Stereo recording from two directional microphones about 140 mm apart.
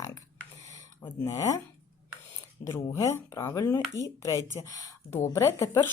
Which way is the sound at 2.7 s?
20° left (ahead or behind).